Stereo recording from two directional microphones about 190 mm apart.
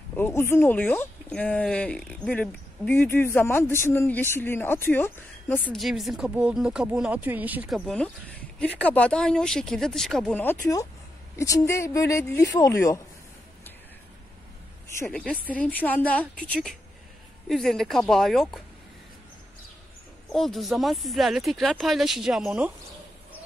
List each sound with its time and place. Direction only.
0.1 s speech: 10° left (ahead or behind)
5.8 s speech: centre (ahead or behind); by 13.0 s 15° left (ahead or behind)
15.0 s speech: 5° left (ahead or behind)
17.5 s speech: centre (ahead or behind)
20.2 s speech: centre (ahead or behind)